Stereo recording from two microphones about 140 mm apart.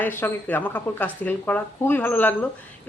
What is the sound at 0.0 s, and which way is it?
Speech, 15° left (ahead or behind).